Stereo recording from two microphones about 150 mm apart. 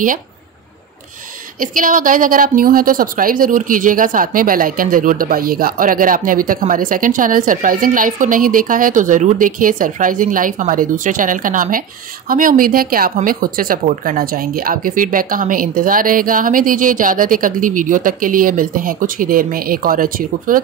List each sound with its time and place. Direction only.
1.6 s a woman's voice: 65° right (ahead or behind)